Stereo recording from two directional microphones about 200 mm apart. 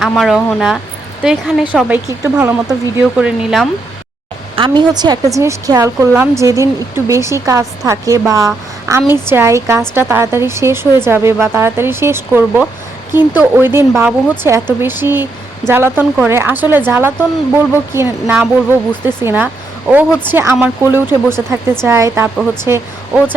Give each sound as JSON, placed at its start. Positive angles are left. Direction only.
{"t": 0.0, "sound": "speech", "side_deg": 0}
{"t": 4.5, "sound": "speech", "side_deg": -25}